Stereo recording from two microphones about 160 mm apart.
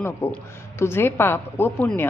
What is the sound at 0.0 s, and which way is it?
Speech, 15° left (ahead or behind).